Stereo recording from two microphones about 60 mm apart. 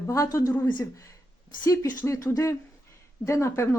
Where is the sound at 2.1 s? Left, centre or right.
Left.